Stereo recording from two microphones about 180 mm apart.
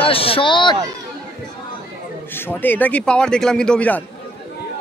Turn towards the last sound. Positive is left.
turn(degrees=10)  # may be behind; listen again after turning